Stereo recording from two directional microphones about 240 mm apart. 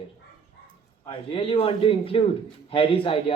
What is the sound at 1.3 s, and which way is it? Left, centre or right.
Speech, left.